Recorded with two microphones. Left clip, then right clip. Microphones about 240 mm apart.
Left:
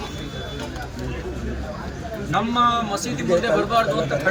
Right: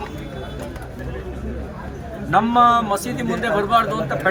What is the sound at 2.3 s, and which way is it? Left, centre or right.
Speech, centre.